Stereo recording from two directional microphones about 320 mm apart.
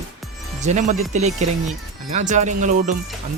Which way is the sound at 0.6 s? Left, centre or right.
Right.